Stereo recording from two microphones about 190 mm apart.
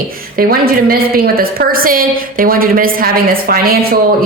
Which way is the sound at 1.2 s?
50° right (ahead or behind).